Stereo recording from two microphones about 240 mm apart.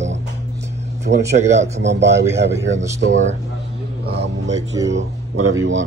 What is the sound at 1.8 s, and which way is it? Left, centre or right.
Speech, right.